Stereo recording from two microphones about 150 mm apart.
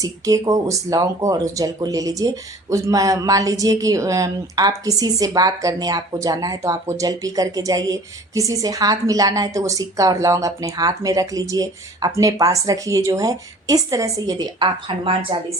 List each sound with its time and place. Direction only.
0.0 s speech: 20° right (ahead or behind)